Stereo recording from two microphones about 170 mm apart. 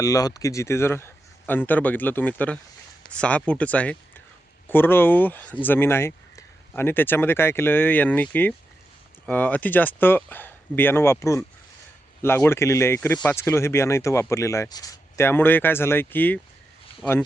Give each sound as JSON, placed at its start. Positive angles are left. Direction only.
{"t": 0.0, "sound": "speech", "side_deg": 20}